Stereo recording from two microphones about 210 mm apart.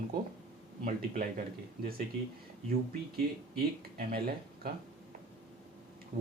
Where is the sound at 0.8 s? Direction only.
40° right (ahead or behind).